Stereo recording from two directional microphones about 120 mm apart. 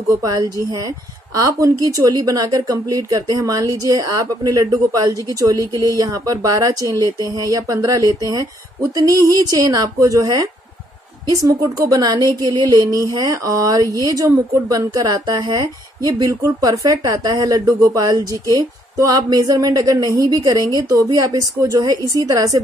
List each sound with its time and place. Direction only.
0.2 s speech: 35° right (ahead or behind)